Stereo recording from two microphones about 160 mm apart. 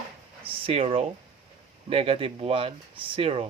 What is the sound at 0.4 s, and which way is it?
Speech, 35° right (ahead or behind).